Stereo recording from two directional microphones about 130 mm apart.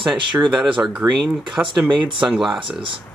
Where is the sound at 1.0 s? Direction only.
25° right (ahead or behind).